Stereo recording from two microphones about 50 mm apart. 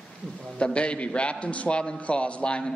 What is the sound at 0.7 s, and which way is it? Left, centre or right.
A man's voice, left.